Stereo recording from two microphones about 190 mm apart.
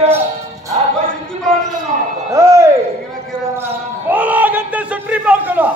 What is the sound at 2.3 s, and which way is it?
Music, 15° right (ahead or behind).